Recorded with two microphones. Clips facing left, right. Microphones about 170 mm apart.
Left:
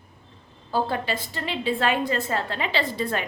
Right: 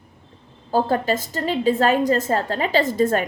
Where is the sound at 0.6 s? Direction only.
45° right (ahead or behind).